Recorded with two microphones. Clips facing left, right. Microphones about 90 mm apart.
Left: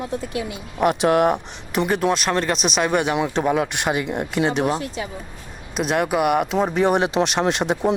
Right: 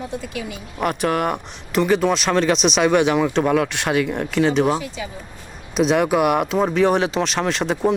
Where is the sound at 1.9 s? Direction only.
5° left (ahead or behind).